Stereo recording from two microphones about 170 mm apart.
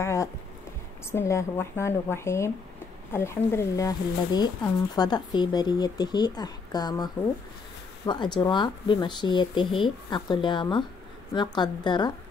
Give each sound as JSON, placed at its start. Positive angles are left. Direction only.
{"t": 0.0, "sound": "music", "side_deg": 15}
{"t": 1.1, "sound": "speech", "side_deg": 15}